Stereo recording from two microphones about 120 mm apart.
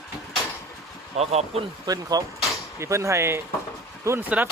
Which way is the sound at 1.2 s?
60° right (ahead or behind).